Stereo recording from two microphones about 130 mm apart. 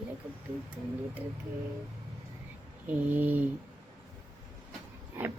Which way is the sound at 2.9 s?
15° right (ahead or behind).